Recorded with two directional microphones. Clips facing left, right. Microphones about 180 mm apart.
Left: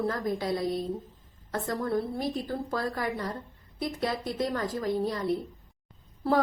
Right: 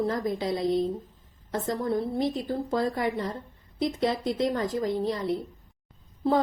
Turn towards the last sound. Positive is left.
turn(degrees=-20)  # may be behind; listen again after turning